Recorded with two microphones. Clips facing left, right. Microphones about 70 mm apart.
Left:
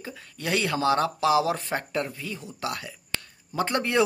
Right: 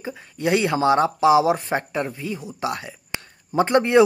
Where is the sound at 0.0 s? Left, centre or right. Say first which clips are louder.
Right 9 dB; right.